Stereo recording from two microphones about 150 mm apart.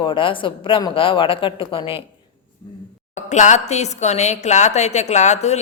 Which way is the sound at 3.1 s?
50° left (ahead or behind).